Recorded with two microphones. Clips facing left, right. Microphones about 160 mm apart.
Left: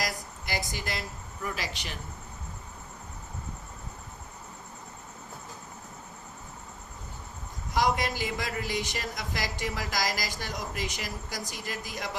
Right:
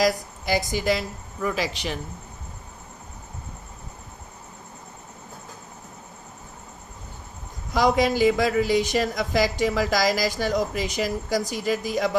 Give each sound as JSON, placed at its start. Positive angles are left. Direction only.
{"t": 0.0, "sound": "a woman's voice", "side_deg": -90}
{"t": 7.7, "sound": "a woman's voice", "side_deg": -90}